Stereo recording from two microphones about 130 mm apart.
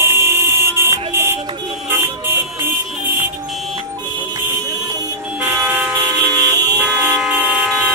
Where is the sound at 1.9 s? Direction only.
15° right (ahead or behind).